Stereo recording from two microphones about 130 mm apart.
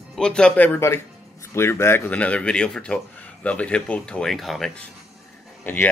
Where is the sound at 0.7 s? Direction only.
20° left (ahead or behind); by 4.8 s 5° left (ahead or behind).